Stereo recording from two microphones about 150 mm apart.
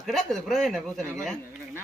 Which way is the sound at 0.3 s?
Centre (ahead or behind).